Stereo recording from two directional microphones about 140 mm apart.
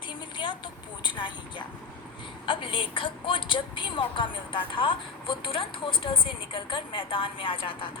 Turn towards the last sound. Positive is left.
turn(degrees=40)  # may be behind; listen again after turning